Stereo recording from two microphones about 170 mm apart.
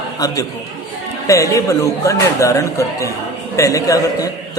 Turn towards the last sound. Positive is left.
turn(degrees=20)  # may be behind; listen again after turning